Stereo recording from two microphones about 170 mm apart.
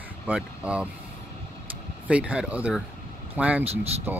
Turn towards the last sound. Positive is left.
turn(degrees=-35)  # may be behind; listen again after turning